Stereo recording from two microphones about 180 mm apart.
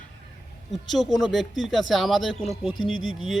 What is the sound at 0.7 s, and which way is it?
A man's voice, centre (ahead or behind).